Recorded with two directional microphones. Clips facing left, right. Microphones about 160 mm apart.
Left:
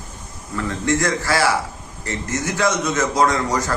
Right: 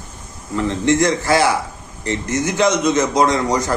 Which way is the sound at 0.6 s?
20° right (ahead or behind).